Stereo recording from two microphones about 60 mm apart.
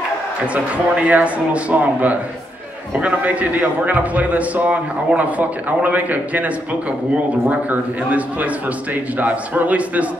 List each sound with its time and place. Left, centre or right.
1.0 s a man's voice: right